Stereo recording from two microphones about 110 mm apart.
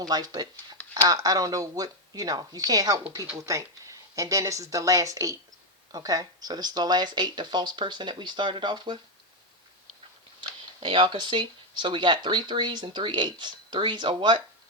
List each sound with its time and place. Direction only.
0.1 s speech: 35° right (ahead or behind)
10.8 s speech: 50° right (ahead or behind)